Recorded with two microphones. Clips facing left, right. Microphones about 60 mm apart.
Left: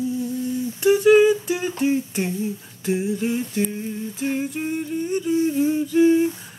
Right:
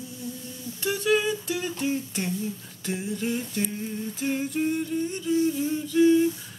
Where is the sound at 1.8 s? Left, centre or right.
Left.